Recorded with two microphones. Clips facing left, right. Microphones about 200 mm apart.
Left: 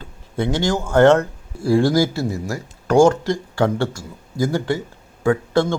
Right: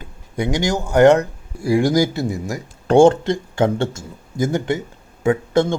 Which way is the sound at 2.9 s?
30° right (ahead or behind).